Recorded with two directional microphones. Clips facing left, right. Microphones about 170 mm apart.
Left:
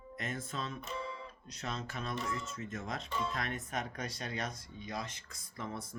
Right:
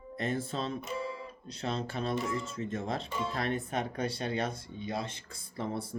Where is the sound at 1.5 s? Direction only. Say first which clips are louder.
Right 7 dB; 30° right (ahead or behind).